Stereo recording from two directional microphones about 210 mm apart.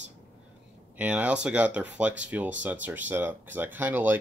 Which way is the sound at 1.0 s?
5° right (ahead or behind).